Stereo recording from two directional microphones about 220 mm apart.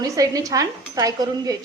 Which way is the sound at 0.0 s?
15° right (ahead or behind).